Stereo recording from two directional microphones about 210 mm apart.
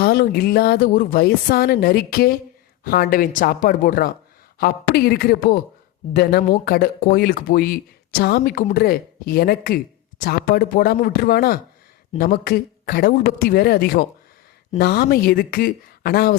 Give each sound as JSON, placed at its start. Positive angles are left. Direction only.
{"t": 0.0, "sound": "speech", "side_deg": 45}
{"t": 6.7, "sound": "speech", "side_deg": 45}